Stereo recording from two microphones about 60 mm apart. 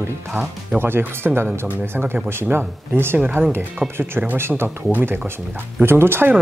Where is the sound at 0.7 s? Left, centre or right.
Right.